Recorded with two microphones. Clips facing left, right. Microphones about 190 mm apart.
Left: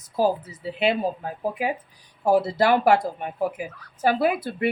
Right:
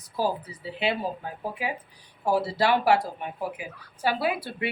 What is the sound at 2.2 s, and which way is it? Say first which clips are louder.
Speech: left 4 dB; 50° left (ahead or behind).